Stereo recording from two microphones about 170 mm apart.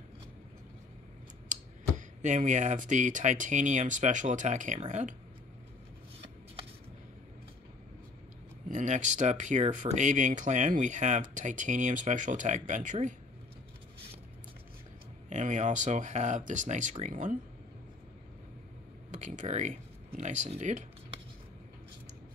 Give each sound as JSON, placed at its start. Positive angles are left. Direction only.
{"t": 1.5, "sound": "speech", "side_deg": -45}
{"t": 8.6, "sound": "speech", "side_deg": -45}
{"t": 15.2, "sound": "speech", "side_deg": -45}
{"t": 19.1, "sound": "speech", "side_deg": -45}